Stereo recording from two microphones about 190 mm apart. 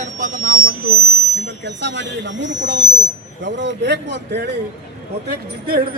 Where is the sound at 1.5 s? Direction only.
65° right (ahead or behind).